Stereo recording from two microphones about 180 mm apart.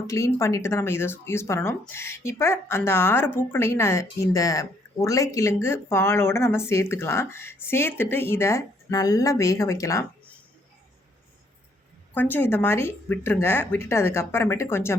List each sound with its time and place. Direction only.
0.1 s speech: 15° left (ahead or behind)
12.1 s speech: 10° left (ahead or behind)